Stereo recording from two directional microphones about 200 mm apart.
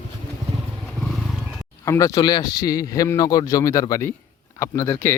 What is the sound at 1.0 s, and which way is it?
Wild animals, centre (ahead or behind).